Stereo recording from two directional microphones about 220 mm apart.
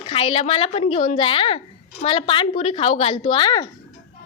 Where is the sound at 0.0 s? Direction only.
25° left (ahead or behind).